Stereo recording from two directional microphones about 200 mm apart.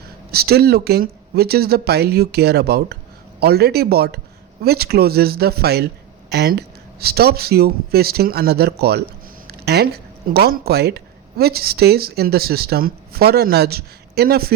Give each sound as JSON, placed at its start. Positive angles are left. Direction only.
{"t": 0.3, "sound": "speech", "side_deg": -50}